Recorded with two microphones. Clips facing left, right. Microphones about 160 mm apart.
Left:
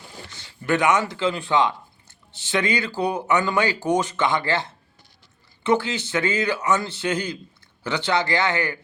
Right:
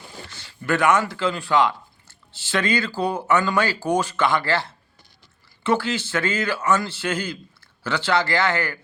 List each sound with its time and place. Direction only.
0.3 s a man's voice: 20° left (ahead or behind)